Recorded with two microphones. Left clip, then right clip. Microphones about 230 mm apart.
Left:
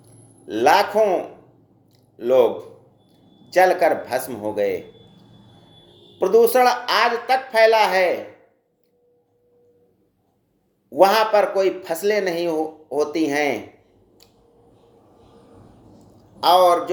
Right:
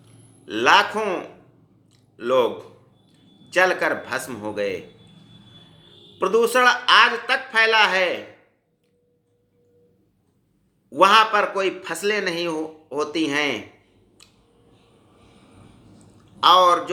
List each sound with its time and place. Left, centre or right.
0.4 s speech: right
2.2 s speech: right
3.6 s speech: right
6.1 s speech: right
10.9 s speech: right
16.4 s speech: right